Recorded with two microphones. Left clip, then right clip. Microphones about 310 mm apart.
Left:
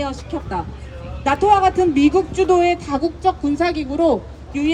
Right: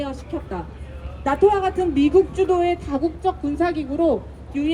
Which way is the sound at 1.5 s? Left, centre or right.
Left.